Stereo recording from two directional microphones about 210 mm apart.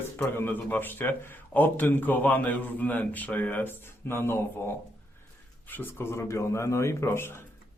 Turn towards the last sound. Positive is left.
turn(degrees=10)  # may be behind; listen again after turning